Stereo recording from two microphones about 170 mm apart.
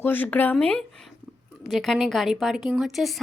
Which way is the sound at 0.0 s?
10° left (ahead or behind).